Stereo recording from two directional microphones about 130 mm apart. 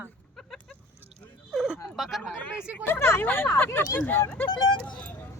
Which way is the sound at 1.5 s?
5° right (ahead or behind).